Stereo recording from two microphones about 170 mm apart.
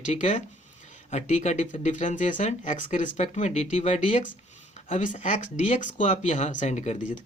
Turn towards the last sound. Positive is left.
turn(degrees=45)  # may be behind; listen again after turning